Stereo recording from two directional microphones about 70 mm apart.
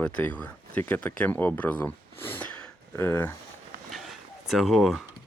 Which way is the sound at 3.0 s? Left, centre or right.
Left.